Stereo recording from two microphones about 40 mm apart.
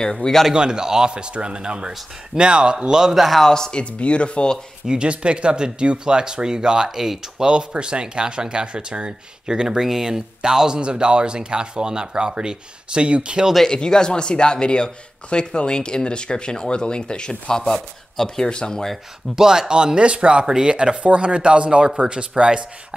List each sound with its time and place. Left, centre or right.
0.1 s speech: centre
0.5 s speech: centre
3.4 s speech: centre
3.8 s speech: left
4.8 s speech: right
7.4 s speech: right
13.7 s speech: centre
19.3 s speech: centre